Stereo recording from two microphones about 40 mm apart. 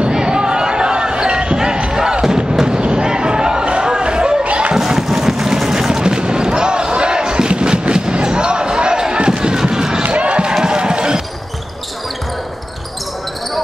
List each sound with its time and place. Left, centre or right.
0.1 s basketball bounce: centre
2.8 s chatter: centre
4.7 s a sound: centre
6.0 s basketball bounce: right
7.9 s slam: right
9.0 s basketball bounce: right
10.0 s basketball bounce: right